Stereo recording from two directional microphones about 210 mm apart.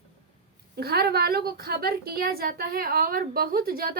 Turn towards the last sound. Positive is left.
turn(degrees=-45)  # may be behind; listen again after turning